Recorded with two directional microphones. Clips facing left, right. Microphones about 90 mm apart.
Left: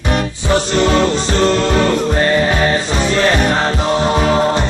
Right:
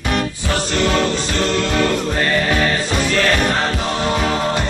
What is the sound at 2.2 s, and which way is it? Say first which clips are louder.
Music: left 3 dB; 25° left (ahead or behind).